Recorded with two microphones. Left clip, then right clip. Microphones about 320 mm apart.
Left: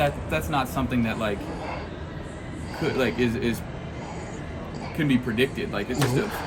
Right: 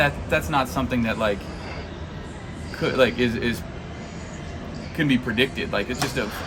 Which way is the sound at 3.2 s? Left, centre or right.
Centre.